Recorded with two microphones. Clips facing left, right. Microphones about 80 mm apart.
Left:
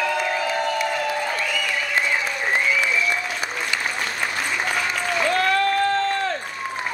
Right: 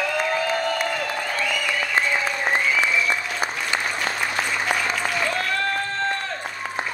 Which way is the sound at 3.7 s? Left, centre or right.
Right.